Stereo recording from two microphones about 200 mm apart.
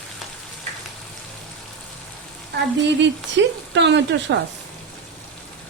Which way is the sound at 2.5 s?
55° right (ahead or behind).